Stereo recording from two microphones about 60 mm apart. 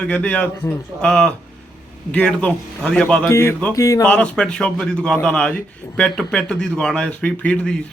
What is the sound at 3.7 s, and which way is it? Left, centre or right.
Speech, left.